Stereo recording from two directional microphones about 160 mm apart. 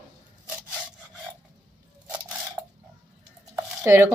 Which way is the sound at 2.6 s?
20° right (ahead or behind).